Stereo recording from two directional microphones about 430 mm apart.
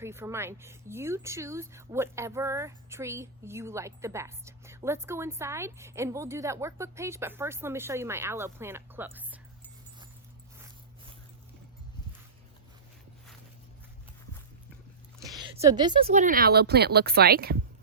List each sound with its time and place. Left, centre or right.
0.0 s speech: centre
15.2 s speech: centre